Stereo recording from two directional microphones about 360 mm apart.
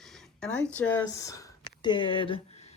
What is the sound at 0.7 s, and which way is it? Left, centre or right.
Speech, centre.